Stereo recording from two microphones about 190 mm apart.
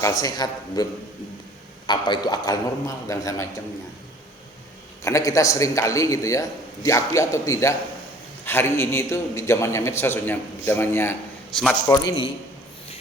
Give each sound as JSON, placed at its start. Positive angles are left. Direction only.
{"t": 0.0, "sound": "a man's voice", "side_deg": 20}
{"t": 1.9, "sound": "a man's voice", "side_deg": 20}
{"t": 5.0, "sound": "a man's voice", "side_deg": 15}
{"t": 11.9, "sound": "a man's voice", "side_deg": 20}